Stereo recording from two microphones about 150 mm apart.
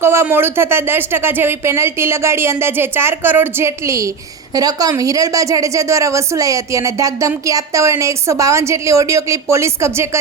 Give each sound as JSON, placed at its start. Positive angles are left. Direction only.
{"t": 0.0, "sound": "a woman's voice", "side_deg": -15}